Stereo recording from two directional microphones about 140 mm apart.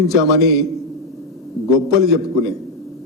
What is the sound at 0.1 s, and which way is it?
Speech, centre (ahead or behind).